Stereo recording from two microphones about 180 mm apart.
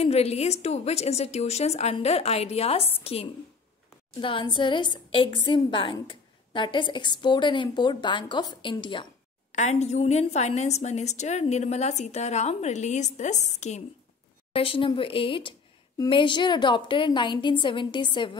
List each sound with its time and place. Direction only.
0.0 s a woman's voice: 35° left (ahead or behind)
9.5 s a woman's voice: 40° left (ahead or behind)
14.5 s a woman's voice: 30° left (ahead or behind)